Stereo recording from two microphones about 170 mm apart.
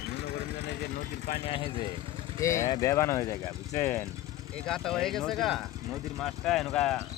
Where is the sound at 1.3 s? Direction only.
35° left (ahead or behind).